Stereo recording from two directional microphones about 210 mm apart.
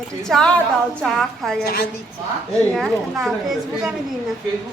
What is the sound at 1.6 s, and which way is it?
Speech, 45° left (ahead or behind).